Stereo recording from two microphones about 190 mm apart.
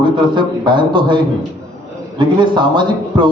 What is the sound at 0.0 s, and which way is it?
Speech, 25° right (ahead or behind).